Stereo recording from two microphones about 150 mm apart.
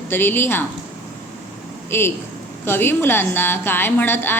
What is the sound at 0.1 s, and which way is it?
Speech, 15° left (ahead or behind).